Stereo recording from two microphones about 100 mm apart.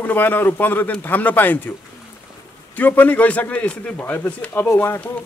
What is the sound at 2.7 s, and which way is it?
A man's voice, 15° left (ahead or behind).